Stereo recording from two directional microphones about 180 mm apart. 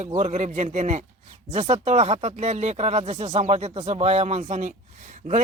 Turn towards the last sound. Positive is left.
turn(degrees=-45)  # may be behind; listen again after turning